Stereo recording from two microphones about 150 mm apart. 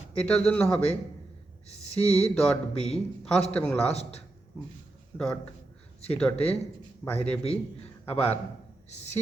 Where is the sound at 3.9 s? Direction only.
45° left (ahead or behind).